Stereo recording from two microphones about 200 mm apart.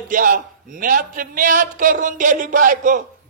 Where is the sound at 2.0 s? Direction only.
40° right (ahead or behind).